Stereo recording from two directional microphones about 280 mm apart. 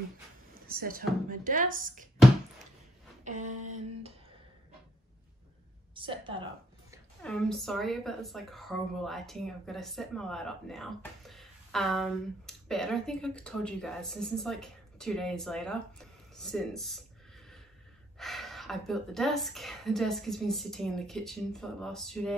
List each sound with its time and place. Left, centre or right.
0.7 s a woman's voice: right
3.3 s a sound: right
3.6 s a woman's voice: right
5.9 s a sound: centre
7.2 s a woman's voice: centre
18.1 s a woman's voice: centre